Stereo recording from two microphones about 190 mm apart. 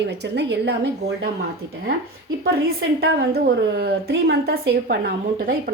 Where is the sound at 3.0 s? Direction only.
60° right (ahead or behind).